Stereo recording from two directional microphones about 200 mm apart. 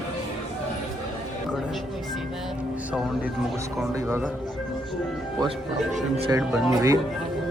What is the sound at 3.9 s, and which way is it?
Speech, 10° right (ahead or behind).